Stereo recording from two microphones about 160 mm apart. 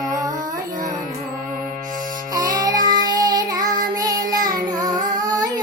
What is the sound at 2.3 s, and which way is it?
Child singing, 25° right (ahead or behind).